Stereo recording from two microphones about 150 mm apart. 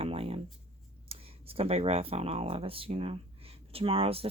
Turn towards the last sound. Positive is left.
turn(degrees=-40)  # may be behind; listen again after turning